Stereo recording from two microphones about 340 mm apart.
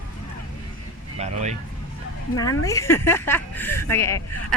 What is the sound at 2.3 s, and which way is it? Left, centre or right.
Speech, centre.